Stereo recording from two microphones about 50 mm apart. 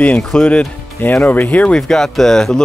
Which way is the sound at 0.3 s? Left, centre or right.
Left.